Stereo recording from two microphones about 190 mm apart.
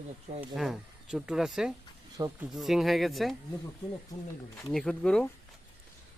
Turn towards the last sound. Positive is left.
turn(degrees=5)  # may be behind; listen again after turning